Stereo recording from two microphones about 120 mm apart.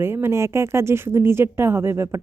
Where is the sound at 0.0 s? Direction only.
20° right (ahead or behind).